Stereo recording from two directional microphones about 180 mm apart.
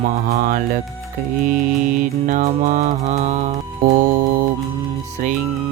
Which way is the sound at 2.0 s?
45° right (ahead or behind).